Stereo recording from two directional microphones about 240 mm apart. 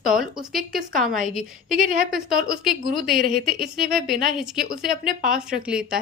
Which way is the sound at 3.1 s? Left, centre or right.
Right.